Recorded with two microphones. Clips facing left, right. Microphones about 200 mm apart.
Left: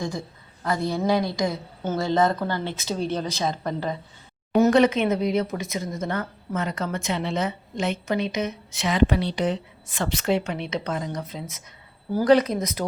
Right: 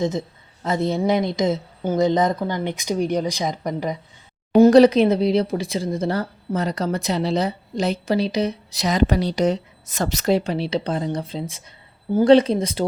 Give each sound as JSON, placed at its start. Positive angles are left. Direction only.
{"t": 0.0, "sound": "a woman's voice", "side_deg": -20}
{"t": 4.5, "sound": "speech", "side_deg": -35}